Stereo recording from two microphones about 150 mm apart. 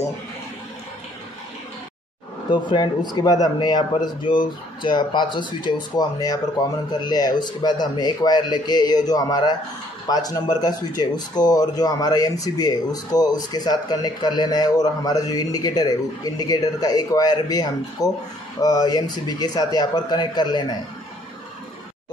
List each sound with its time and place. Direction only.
2.5 s speech: 30° left (ahead or behind)